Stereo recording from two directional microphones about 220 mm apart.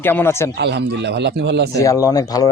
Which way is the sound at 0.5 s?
50° right (ahead or behind).